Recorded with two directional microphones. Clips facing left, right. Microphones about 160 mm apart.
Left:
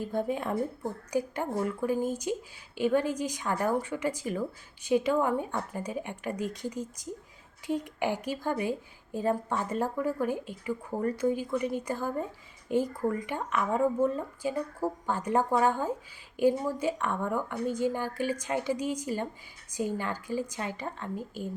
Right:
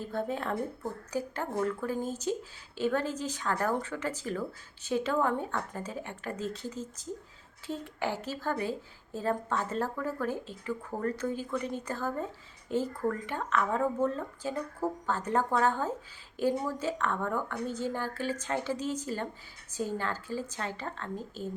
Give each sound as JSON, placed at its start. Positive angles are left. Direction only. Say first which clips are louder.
{"t": 0.0, "sound": "a woman's voice", "louder": "left 3 dB", "side_deg": 15}